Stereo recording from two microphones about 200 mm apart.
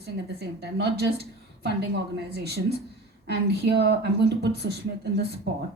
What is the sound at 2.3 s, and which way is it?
A woman's voice, 55° right (ahead or behind).